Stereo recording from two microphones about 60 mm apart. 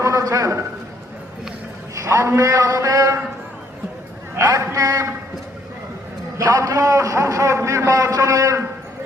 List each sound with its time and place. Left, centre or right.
0.0 s a sound: right
2.0 s a man's voice: right
4.7 s a man's voice: right
6.3 s a man's voice: right